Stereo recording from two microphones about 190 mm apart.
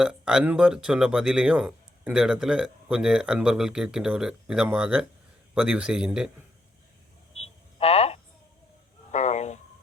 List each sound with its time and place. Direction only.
0.0 s speech: 5° right (ahead or behind)
7.3 s hum: 30° left (ahead or behind)
9.1 s a sound: 35° left (ahead or behind)